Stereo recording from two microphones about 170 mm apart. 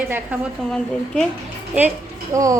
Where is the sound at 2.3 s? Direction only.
20° right (ahead or behind).